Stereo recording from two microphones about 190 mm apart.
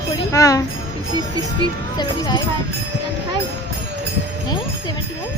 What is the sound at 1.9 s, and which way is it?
Speech, 20° left (ahead or behind).